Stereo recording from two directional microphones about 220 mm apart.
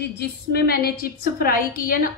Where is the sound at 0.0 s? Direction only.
50° left (ahead or behind).